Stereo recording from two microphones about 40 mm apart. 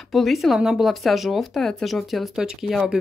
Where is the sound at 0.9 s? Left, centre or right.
Centre.